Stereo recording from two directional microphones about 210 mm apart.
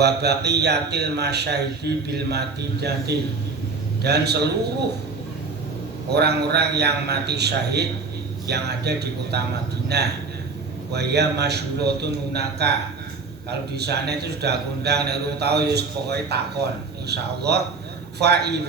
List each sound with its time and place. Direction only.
0.0 s a man's voice: 50° right (ahead or behind)
6.1 s a man's voice: 50° right (ahead or behind)
13.7 s a man's voice: 50° right (ahead or behind)